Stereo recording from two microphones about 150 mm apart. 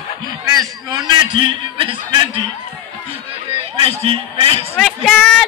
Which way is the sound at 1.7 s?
35° right (ahead or behind).